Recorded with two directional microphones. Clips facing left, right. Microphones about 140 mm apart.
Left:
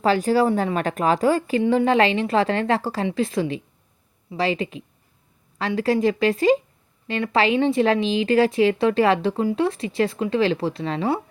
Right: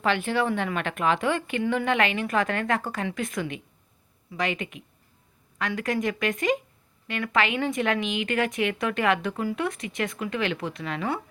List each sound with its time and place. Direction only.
0.0 s speech: 35° left (ahead or behind)